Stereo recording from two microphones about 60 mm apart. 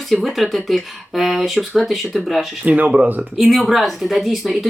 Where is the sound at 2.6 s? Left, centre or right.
Right.